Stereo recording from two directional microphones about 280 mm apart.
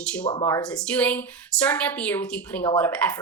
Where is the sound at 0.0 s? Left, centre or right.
Centre.